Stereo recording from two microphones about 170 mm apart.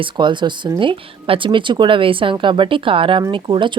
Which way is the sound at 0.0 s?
25° right (ahead or behind).